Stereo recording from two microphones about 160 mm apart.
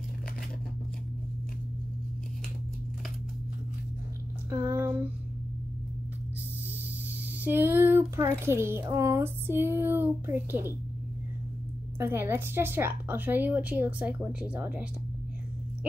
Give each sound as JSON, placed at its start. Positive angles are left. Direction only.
{"t": 4.5, "sound": "a sound", "side_deg": -15}
{"t": 7.4, "sound": "a woman's voice", "side_deg": -15}
{"t": 12.0, "sound": "a woman's voice", "side_deg": -15}